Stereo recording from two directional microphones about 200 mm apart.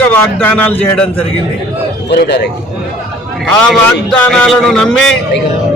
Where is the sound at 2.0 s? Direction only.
55° left (ahead or behind).